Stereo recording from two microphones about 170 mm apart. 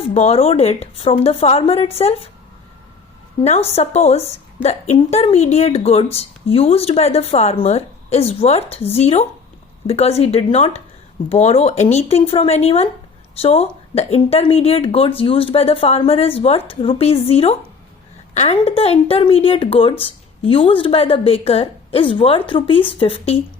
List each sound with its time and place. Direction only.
0.1 s a woman's voice: 40° left (ahead or behind)
3.8 s a woman's voice: 40° left (ahead or behind)